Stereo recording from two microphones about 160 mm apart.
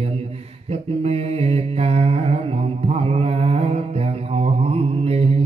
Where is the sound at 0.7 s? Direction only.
40° right (ahead or behind).